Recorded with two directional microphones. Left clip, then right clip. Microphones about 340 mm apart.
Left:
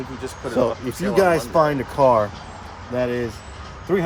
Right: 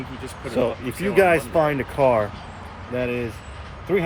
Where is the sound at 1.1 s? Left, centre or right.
Left.